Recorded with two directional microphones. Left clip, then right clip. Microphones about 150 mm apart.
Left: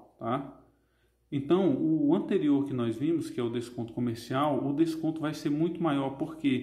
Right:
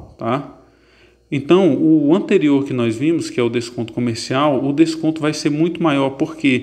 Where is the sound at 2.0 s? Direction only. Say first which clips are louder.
Right 12 dB; 25° right (ahead or behind).